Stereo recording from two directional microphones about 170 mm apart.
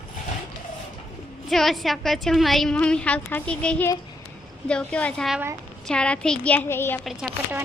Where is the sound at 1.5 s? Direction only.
Centre (ahead or behind).